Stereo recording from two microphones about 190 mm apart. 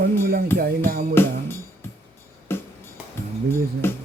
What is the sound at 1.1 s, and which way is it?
Speech, 10° left (ahead or behind).